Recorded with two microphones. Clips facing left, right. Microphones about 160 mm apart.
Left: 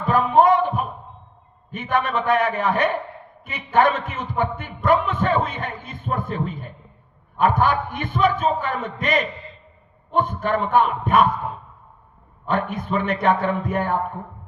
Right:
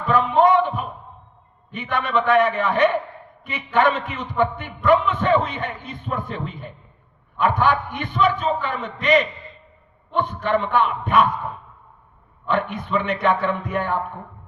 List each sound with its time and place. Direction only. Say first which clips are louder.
0.0 s a sound: even; 45° left (ahead or behind)
1.7 s a man's voice: even; 45° left (ahead or behind)
12.5 s a man's voice: even; 45° left (ahead or behind)